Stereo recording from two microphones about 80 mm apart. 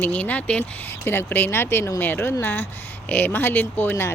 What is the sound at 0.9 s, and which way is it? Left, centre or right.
Speech, left.